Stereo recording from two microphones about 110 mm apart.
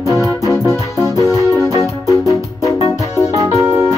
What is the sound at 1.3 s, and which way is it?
Music, 30° left (ahead or behind).